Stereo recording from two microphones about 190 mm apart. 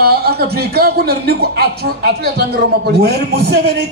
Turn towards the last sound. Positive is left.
turn(degrees=-55)  # may be behind; listen again after turning